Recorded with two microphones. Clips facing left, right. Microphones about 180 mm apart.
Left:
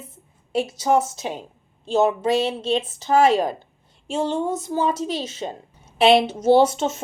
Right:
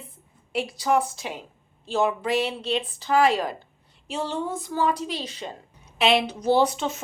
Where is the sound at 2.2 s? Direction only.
25° left (ahead or behind).